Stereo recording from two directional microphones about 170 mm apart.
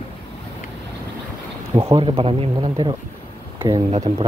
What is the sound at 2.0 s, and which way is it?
Speech, 35° right (ahead or behind).